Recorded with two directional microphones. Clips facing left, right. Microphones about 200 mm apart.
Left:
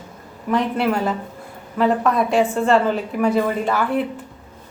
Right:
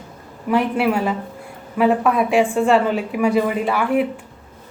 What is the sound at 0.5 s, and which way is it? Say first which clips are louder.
A woman's voice: right 2 dB; 5° right (ahead or behind).